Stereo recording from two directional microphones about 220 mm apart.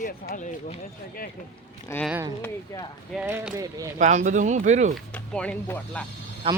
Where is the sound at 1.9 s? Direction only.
10° left (ahead or behind).